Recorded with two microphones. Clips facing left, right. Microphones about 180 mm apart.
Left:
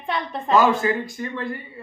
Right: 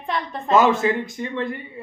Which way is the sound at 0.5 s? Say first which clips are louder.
Right 1 dB; 20° right (ahead or behind).